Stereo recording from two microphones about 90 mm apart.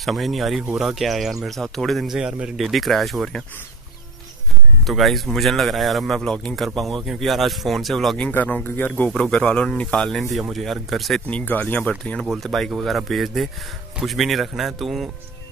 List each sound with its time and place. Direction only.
0.0 s speech: centre (ahead or behind)
4.8 s speech: centre (ahead or behind)
8.2 s speech: 20° left (ahead or behind); by 11.2 s centre (ahead or behind)
11.2 s speech: 15° left (ahead or behind); by 15.0 s centre (ahead or behind)